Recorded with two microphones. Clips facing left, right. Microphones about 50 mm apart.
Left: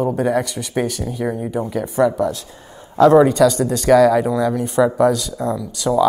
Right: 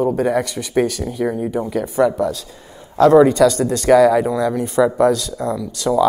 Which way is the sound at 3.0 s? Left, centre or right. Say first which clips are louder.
Even; left.